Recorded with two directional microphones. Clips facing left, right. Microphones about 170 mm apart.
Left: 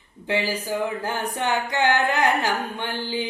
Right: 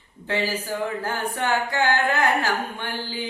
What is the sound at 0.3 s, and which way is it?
Singing, 15° left (ahead or behind).